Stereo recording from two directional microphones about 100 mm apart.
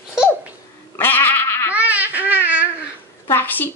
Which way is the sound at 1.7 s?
15° right (ahead or behind).